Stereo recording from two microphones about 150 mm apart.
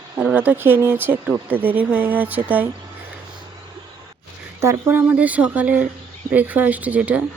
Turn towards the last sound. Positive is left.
turn(degrees=-10)  # may be behind; listen again after turning